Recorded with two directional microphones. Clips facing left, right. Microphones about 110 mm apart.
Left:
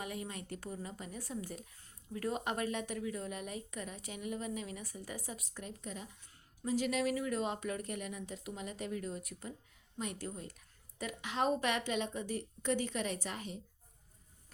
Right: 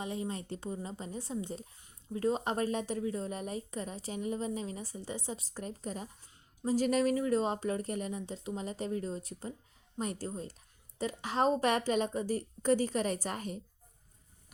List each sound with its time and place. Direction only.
0.0 s a woman's voice: 25° right (ahead or behind); by 13.6 s 45° right (ahead or behind)